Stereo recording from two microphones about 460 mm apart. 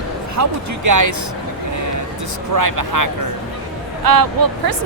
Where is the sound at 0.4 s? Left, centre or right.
Right.